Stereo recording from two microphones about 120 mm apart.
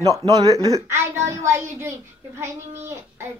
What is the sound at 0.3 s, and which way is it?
A woman's voice, 30° right (ahead or behind).